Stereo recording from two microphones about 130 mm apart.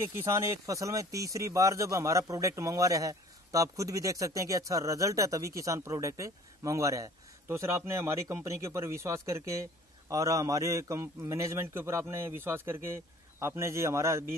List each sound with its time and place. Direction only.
0.2 s speech: 20° right (ahead or behind)